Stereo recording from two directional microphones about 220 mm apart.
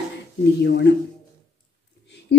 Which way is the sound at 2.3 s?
50° left (ahead or behind).